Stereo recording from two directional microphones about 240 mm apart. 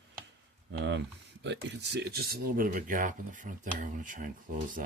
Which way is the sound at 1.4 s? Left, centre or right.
Right.